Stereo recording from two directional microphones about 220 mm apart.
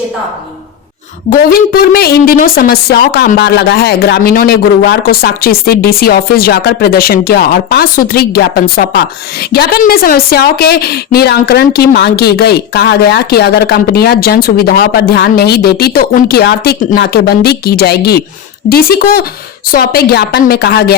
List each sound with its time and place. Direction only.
1.3 s a woman's voice: 40° left (ahead or behind)